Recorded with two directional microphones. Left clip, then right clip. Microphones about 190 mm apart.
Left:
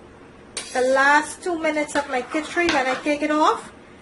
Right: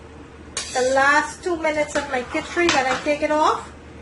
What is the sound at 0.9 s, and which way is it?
A woman's voice, 60° left (ahead or behind).